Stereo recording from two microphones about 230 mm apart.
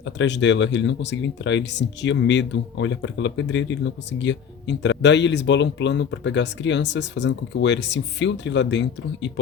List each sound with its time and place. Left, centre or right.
0.0 s speech: left